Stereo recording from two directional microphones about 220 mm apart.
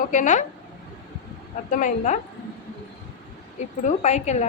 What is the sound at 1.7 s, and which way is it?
Speech, 35° left (ahead or behind).